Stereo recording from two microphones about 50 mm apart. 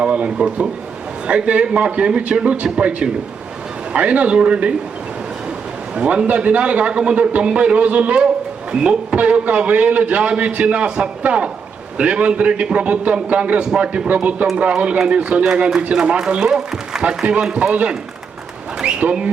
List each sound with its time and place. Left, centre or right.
0.0 s a man's voice: right
3.9 s a man's voice: right
5.9 s a man's voice: right